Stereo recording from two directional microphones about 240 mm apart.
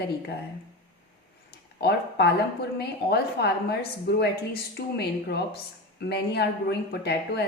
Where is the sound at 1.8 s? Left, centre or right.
Left.